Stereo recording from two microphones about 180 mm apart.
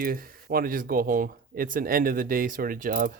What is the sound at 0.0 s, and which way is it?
Speech, 55° right (ahead or behind).